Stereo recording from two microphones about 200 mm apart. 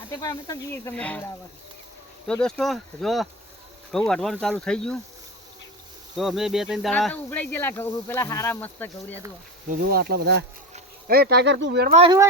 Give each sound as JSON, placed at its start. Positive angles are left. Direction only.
{"t": 0.2, "sound": "speech", "side_deg": 20}
{"t": 2.2, "sound": "speech", "side_deg": 5}
{"t": 6.1, "sound": "speech", "side_deg": 0}
{"t": 9.9, "sound": "speech", "side_deg": -50}
{"t": 11.9, "sound": "speech", "side_deg": -25}